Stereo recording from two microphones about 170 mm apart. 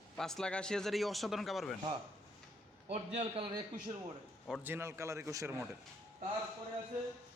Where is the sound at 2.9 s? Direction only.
40° right (ahead or behind).